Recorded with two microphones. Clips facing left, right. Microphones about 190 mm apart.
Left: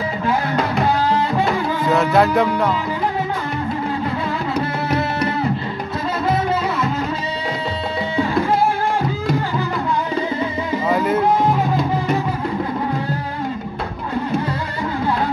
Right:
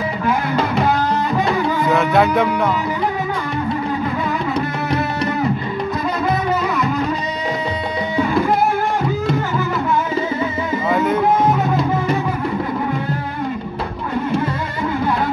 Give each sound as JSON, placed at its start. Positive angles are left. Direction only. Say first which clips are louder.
{"t": 1.4, "sound": "music", "louder": "right 1 dB", "side_deg": 0}
{"t": 10.9, "sound": "music", "louder": "right 1 dB", "side_deg": 0}